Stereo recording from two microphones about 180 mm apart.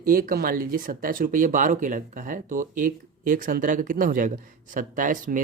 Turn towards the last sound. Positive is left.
turn(degrees=-45)  # may be behind; listen again after turning